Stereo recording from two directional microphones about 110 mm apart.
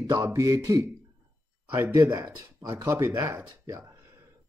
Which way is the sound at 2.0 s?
35° right (ahead or behind).